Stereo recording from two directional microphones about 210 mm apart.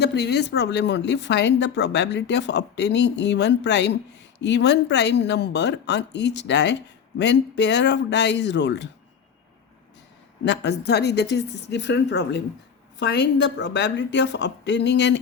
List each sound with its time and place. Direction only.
0.0 s speech: 50° left (ahead or behind)
10.4 s speech: 55° left (ahead or behind)